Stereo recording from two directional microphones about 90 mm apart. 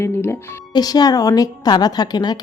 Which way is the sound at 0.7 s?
45° left (ahead or behind).